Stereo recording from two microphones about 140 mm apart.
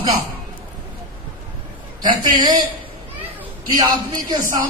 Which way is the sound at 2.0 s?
35° right (ahead or behind).